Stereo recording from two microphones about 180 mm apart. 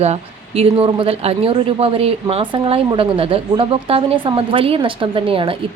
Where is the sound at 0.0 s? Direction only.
35° right (ahead or behind).